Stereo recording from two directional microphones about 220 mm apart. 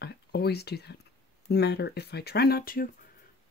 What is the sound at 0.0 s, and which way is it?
Speech, 45° left (ahead or behind).